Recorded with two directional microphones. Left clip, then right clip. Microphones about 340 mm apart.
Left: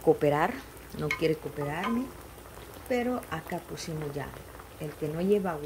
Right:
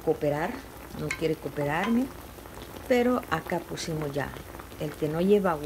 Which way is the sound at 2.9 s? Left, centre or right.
Centre.